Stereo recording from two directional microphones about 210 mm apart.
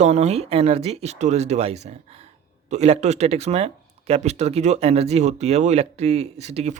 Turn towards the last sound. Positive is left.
turn(degrees=-30)  # may be behind; listen again after turning